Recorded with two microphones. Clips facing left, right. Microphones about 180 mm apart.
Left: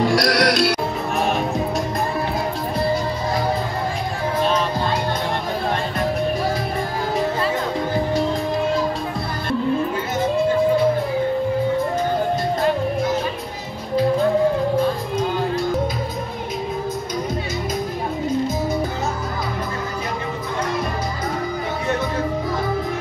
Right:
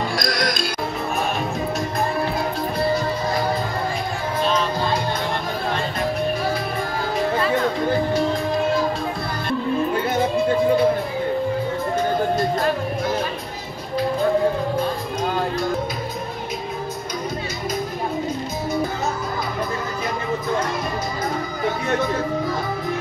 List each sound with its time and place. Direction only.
0.0 s music: 75° left (ahead or behind)